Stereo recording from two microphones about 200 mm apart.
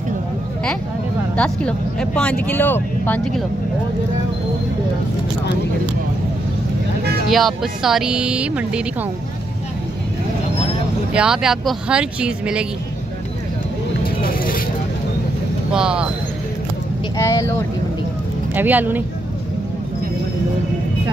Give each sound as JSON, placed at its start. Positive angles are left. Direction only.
{"t": 1.3, "sound": "speech", "side_deg": 5}
{"t": 7.2, "sound": "speech", "side_deg": 0}
{"t": 11.1, "sound": "speech", "side_deg": -5}
{"t": 14.0, "sound": "vehicle", "side_deg": 45}
{"t": 15.7, "sound": "speech", "side_deg": -5}
{"t": 17.2, "sound": "speech", "side_deg": 15}
{"t": 18.5, "sound": "speech", "side_deg": -10}